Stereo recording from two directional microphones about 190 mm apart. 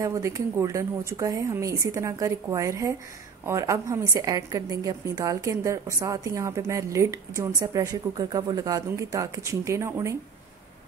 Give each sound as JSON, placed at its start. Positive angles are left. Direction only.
{"t": 0.0, "sound": "a woman's voice", "side_deg": -15}